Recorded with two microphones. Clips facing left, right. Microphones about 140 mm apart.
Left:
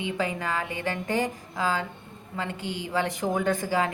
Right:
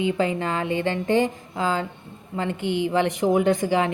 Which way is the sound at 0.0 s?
25° right (ahead or behind).